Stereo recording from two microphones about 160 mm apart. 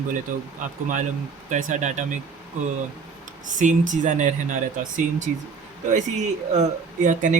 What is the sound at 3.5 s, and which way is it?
Speech, 50° right (ahead or behind).